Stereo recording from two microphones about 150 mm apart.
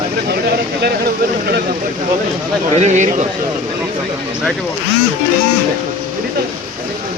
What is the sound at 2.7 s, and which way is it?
Speech, 50° right (ahead or behind).